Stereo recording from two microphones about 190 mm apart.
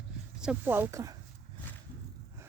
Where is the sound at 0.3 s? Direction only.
5° right (ahead or behind).